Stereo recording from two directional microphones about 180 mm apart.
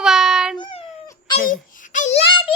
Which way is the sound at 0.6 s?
30° left (ahead or behind).